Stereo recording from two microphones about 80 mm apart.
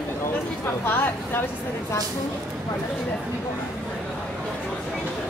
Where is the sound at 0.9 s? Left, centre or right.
Left.